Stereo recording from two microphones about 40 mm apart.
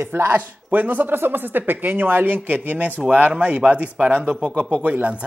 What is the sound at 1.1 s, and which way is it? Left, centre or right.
Speech, right.